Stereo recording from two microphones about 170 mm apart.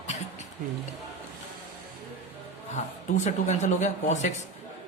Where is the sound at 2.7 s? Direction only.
45° left (ahead or behind).